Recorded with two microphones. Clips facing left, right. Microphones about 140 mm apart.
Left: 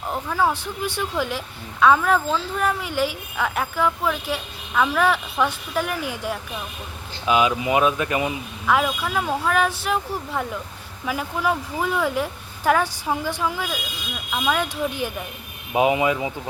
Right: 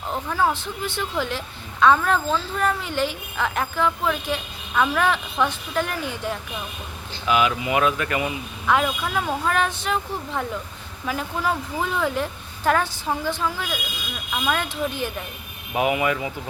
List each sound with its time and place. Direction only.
0.1 s a woman's voice: 5° left (ahead or behind)
7.3 s speech: 20° left (ahead or behind)
8.6 s a woman's voice: 5° left (ahead or behind)
15.7 s speech: 20° left (ahead or behind)